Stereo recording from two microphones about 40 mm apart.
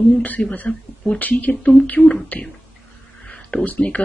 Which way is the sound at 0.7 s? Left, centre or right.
Left.